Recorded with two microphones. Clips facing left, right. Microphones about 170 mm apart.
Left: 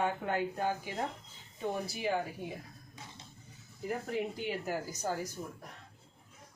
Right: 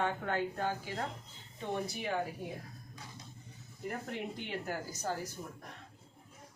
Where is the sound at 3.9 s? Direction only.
5° left (ahead or behind).